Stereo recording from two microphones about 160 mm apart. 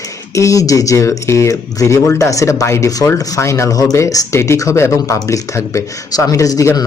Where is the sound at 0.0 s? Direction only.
20° left (ahead or behind).